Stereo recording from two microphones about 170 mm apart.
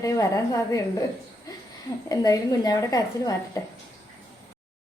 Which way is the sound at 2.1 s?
20° left (ahead or behind).